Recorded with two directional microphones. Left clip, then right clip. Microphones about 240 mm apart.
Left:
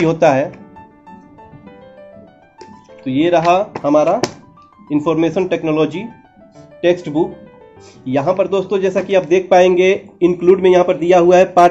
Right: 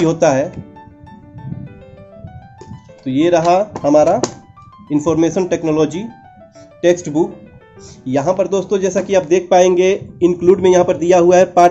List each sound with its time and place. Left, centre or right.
0.0 s speech: centre
3.1 s speech: centre